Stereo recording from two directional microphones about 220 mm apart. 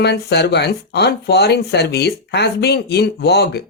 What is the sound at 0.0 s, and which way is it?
Speech, 50° left (ahead or behind).